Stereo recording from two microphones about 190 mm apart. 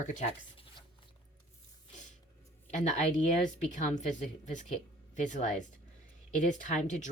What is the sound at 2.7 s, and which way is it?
Speech, 40° left (ahead or behind).